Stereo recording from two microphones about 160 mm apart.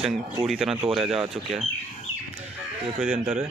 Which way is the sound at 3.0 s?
5° right (ahead or behind).